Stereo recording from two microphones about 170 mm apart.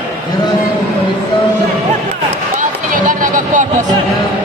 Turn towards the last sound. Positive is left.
turn(degrees=-50)  # may be behind; listen again after turning